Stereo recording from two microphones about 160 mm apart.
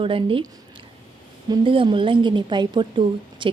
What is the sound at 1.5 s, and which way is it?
A woman's voice, 35° right (ahead or behind).